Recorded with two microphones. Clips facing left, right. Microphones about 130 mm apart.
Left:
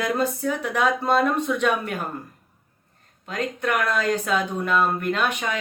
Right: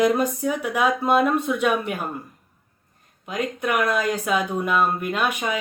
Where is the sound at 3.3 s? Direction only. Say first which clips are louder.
Right 1 dB; 10° right (ahead or behind).